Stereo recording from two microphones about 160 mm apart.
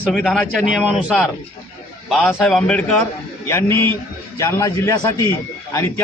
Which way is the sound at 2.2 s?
10° left (ahead or behind).